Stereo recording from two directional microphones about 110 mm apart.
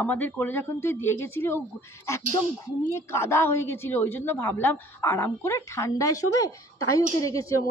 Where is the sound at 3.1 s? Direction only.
25° left (ahead or behind).